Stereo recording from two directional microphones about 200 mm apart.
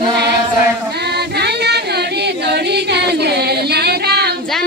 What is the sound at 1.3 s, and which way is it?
Singing, 55° right (ahead or behind).